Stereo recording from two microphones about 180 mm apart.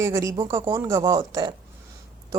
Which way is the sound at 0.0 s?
20° right (ahead or behind).